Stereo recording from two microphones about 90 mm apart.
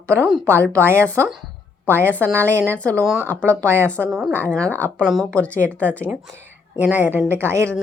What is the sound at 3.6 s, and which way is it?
Speech, 25° right (ahead or behind).